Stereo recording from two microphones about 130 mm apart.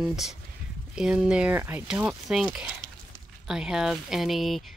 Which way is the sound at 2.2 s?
5° right (ahead or behind).